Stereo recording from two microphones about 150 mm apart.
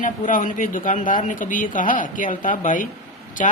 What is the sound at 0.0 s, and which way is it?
Speech, 65° left (ahead or behind).